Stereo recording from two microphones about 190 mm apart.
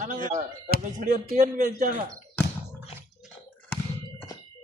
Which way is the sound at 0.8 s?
45° right (ahead or behind).